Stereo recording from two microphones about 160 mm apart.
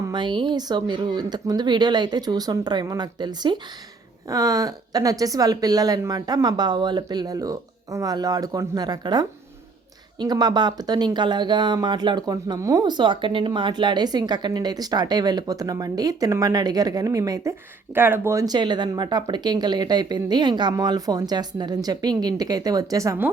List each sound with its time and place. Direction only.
0.0 s speech: 30° right (ahead or behind)